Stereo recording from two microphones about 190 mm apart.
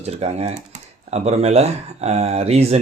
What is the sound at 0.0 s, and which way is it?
Speech, 35° right (ahead or behind).